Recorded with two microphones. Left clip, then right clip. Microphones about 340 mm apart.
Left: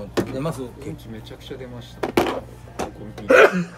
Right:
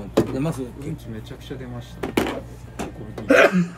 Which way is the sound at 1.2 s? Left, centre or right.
Centre.